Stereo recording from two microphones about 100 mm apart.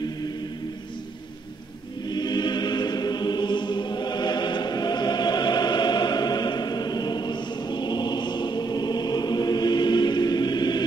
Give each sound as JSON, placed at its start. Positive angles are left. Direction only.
{"t": 2.0, "sound": "choir", "side_deg": 45}